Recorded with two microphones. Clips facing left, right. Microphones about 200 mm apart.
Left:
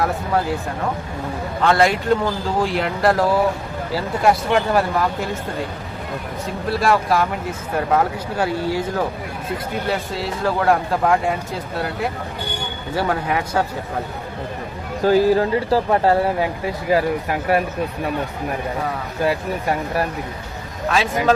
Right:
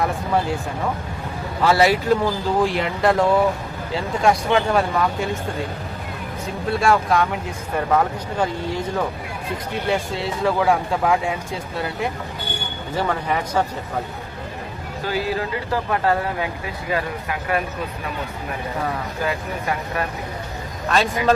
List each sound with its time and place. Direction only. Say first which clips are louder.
0.0 s speech: left 1 dB; centre (ahead or behind)
1.6 s speech: even; 5° right (ahead or behind)
6.7 s speech: even; centre (ahead or behind)
8.4 s speech: left 3 dB; 5° left (ahead or behind)
9.8 s speech: right 1 dB; centre (ahead or behind)
13.0 s speech: left 2 dB; 10° left (ahead or behind)
15.0 s speech: left 9 dB; 40° left (ahead or behind)
20.9 s speech: left 1 dB; centre (ahead or behind)